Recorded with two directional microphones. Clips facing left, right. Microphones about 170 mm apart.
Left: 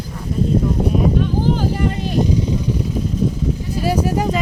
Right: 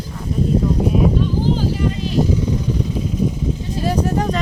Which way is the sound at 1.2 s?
55° left (ahead or behind).